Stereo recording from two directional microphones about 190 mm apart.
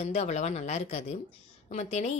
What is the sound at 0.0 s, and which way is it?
Speech, 35° left (ahead or behind).